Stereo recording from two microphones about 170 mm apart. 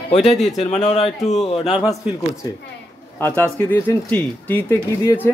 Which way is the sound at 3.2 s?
10° left (ahead or behind).